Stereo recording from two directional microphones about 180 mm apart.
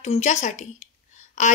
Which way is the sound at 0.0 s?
40° left (ahead or behind).